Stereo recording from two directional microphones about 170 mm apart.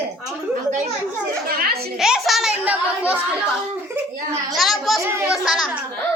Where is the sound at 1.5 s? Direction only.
60° right (ahead or behind).